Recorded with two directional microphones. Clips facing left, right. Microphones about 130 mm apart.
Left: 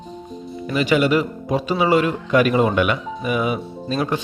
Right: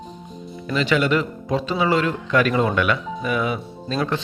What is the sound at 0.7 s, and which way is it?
A man's voice, 15° left (ahead or behind).